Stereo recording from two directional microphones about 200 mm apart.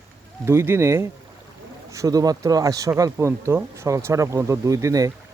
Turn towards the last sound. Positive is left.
turn(degrees=-15)  # may be behind; listen again after turning